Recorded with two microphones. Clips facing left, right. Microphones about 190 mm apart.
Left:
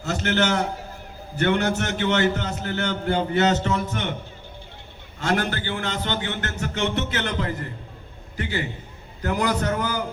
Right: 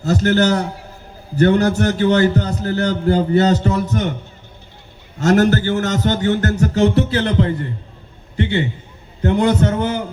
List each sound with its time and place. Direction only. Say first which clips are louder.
0.0 s a man's voice: right 8 dB; 35° right (ahead or behind)
5.2 s a man's voice: right 10 dB; 45° right (ahead or behind); by 10.0 s 25° right (ahead or behind)